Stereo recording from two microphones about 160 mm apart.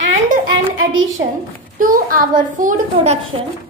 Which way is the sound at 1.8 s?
60° right (ahead or behind).